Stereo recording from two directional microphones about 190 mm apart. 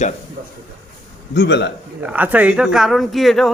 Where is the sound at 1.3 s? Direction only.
65° left (ahead or behind).